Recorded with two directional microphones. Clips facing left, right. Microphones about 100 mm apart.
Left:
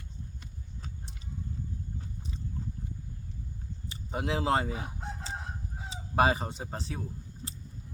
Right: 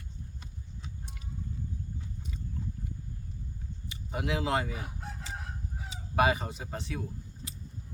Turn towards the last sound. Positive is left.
turn(degrees=30)  # may be behind; listen again after turning